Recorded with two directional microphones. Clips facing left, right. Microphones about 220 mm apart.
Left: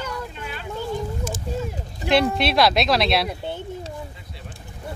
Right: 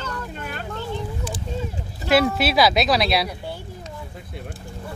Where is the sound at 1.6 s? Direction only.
5° right (ahead or behind).